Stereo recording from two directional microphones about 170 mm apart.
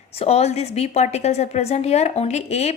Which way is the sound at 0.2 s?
40° left (ahead or behind).